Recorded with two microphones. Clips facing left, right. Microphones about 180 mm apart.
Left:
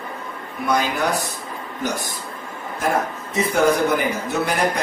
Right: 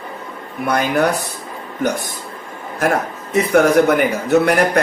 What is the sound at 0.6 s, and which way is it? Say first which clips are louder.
Speech: right 4 dB; 60° right (ahead or behind).